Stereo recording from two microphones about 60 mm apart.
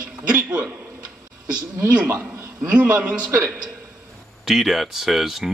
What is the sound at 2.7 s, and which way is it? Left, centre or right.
Speech, right.